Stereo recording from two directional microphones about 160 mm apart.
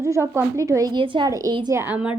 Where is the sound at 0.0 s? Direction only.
15° right (ahead or behind).